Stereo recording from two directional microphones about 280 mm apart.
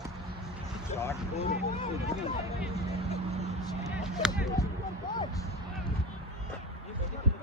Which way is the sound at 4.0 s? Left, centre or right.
Centre.